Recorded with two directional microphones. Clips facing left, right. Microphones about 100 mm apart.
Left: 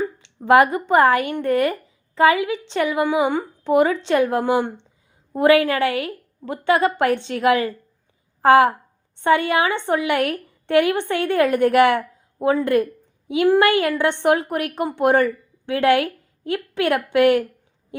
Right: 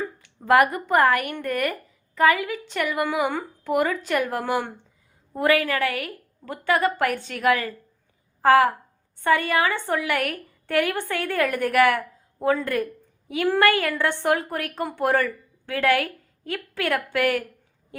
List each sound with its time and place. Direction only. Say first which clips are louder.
0.0 s a woman's voice: left 6 dB; 20° left (ahead or behind)